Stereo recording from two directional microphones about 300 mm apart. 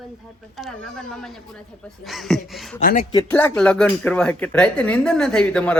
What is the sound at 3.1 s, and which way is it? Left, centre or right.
Speech, centre.